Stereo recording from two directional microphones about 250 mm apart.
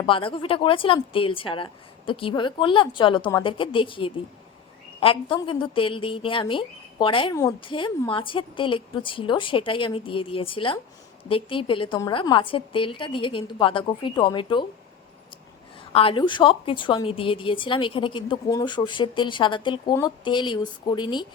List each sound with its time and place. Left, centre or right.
0.0 s a woman's voice: left
16.0 s a woman's voice: left